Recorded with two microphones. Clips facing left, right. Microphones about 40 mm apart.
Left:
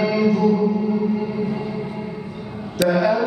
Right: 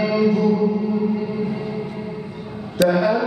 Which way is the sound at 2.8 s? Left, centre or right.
Centre.